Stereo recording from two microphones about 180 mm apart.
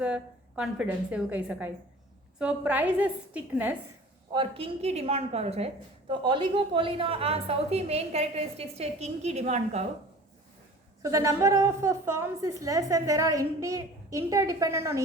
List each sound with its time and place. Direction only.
0.0 s a woman's voice: 5° right (ahead or behind)
4.3 s a woman's voice: 30° right (ahead or behind)
11.0 s a woman's voice: 15° right (ahead or behind)